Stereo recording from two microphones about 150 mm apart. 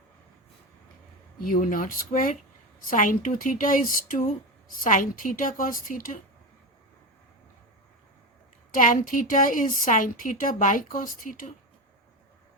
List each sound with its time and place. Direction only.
1.4 s a woman's voice: 65° left (ahead or behind)
8.7 s a woman's voice: 65° left (ahead or behind)